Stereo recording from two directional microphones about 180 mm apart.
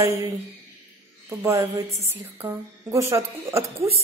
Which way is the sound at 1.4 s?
15° right (ahead or behind).